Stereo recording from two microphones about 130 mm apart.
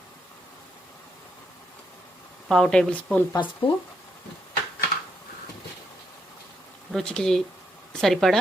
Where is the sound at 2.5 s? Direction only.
5° left (ahead or behind).